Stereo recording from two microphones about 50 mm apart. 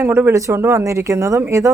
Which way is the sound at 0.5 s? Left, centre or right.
Right.